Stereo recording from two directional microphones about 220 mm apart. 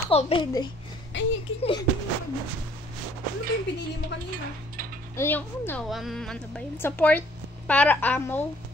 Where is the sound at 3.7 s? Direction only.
50° left (ahead or behind).